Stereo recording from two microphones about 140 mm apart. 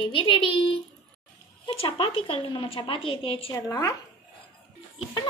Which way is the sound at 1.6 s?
40° left (ahead or behind).